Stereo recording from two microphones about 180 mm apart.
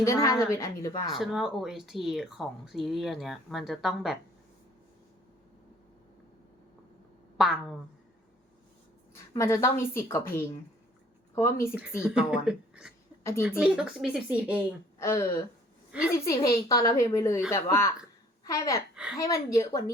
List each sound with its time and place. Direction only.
0.0 s a woman's voice: 15° left (ahead or behind)
1.2 s a woman's voice: centre (ahead or behind)
7.3 s a woman's voice: centre (ahead or behind)
9.1 s a woman's voice: 15° left (ahead or behind)
11.3 s a woman's voice: 15° left (ahead or behind)
11.7 s a woman's voice: 5° right (ahead or behind)
14.9 s a woman's voice: 15° left (ahead or behind)
15.9 s a woman's voice: 5° right (ahead or behind)
16.2 s a woman's voice: 20° left (ahead or behind)